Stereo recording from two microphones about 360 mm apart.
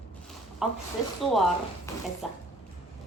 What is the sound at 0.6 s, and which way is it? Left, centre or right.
A woman's voice, centre.